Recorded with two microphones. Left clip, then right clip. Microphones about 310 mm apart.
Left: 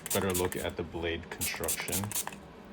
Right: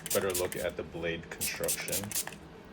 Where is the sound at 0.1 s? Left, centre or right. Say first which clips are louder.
Even; left.